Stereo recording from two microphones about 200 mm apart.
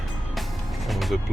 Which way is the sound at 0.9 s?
Centre (ahead or behind).